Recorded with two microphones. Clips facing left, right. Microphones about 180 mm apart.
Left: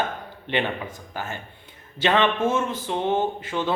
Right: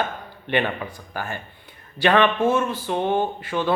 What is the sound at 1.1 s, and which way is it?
Speech, 20° left (ahead or behind).